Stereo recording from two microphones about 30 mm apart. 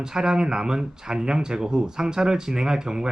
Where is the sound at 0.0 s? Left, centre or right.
Right.